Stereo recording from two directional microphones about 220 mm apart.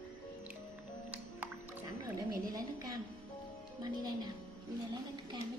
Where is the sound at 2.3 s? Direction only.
15° right (ahead or behind).